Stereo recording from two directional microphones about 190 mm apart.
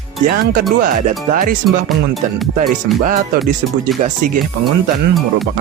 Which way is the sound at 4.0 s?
45° right (ahead or behind).